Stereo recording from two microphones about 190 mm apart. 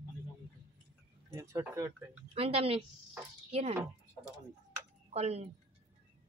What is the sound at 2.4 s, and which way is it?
Speech, 30° right (ahead or behind).